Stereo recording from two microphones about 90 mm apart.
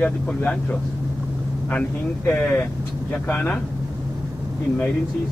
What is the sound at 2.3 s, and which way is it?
Speech, 15° left (ahead or behind).